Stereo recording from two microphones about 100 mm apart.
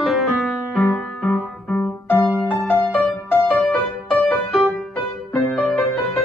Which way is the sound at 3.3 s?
15° left (ahead or behind).